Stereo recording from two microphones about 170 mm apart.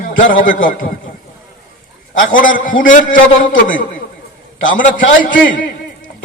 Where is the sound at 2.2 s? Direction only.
55° left (ahead or behind).